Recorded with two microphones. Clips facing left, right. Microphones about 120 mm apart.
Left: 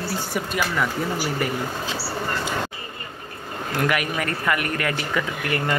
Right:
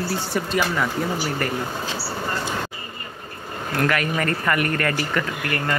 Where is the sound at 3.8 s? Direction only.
10° left (ahead or behind).